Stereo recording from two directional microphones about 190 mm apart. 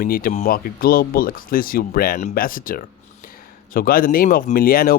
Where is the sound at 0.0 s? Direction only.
50° left (ahead or behind).